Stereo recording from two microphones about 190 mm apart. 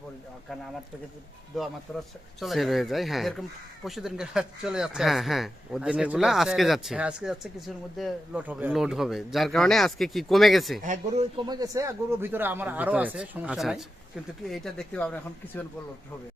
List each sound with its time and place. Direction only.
1.5 s speech: centre (ahead or behind)
10.8 s speech: 35° right (ahead or behind)
11.4 s speech: 20° right (ahead or behind); by 15.6 s 10° left (ahead or behind)